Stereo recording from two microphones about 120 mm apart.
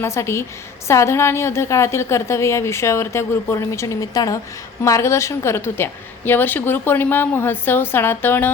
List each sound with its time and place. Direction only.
0.0 s a woman's voice: 25° left (ahead or behind)